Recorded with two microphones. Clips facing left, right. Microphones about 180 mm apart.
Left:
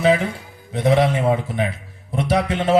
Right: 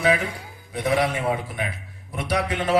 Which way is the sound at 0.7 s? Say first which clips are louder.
Left 5 dB; 25° left (ahead or behind).